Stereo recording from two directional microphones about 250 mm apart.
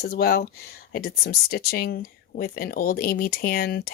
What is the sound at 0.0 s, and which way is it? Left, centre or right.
Speech, left.